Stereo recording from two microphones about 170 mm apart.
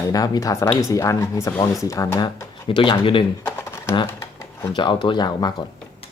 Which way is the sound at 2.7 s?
30° left (ahead or behind).